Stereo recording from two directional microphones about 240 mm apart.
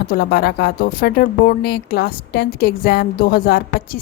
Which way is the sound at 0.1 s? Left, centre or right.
Left.